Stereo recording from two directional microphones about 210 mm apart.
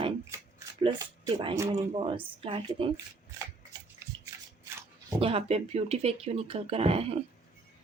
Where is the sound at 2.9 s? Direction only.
15° right (ahead or behind).